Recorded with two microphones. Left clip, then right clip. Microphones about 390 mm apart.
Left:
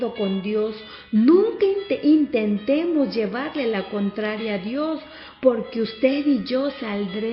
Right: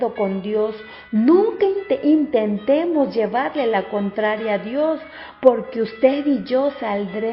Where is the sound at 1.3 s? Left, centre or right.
Centre.